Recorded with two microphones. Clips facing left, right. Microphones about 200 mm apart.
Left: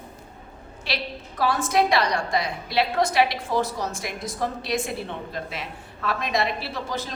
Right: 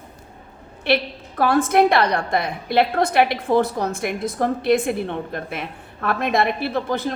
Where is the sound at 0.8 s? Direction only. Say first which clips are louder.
Right 10 dB; 55° right (ahead or behind).